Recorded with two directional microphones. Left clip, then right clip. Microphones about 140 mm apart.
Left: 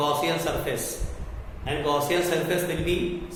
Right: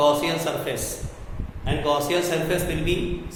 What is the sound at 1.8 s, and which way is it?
A man's voice, 25° right (ahead or behind).